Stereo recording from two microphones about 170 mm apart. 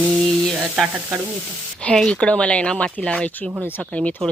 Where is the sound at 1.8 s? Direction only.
5° left (ahead or behind).